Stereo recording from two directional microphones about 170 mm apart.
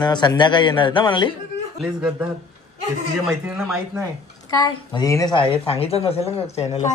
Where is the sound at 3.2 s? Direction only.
Centre (ahead or behind).